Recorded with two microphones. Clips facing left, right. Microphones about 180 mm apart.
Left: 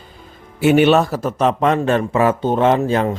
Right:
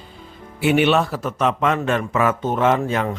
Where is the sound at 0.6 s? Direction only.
40° left (ahead or behind).